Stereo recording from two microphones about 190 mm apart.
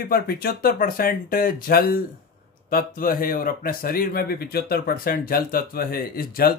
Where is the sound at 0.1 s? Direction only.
50° left (ahead or behind).